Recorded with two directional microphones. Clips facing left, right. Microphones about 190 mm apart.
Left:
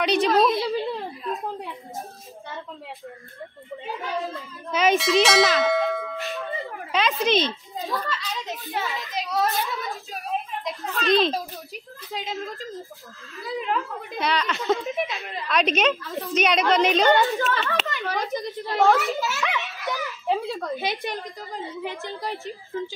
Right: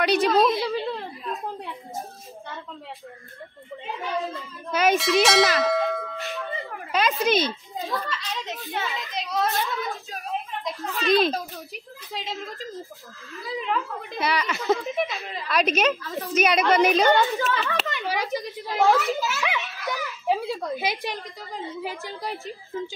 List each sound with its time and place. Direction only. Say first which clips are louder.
0.0 s a child's voice: even; 5° right (ahead or behind)
4.0 s a child's voice: right 2 dB; centre (ahead or behind)